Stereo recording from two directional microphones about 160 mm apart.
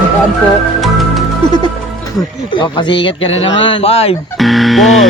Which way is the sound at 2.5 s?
30° left (ahead or behind).